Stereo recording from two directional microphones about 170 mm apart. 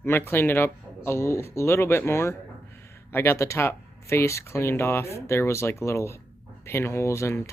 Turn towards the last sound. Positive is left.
turn(degrees=15)  # may be behind; listen again after turning